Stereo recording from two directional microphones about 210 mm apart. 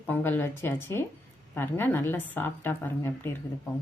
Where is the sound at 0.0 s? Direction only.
10° left (ahead or behind).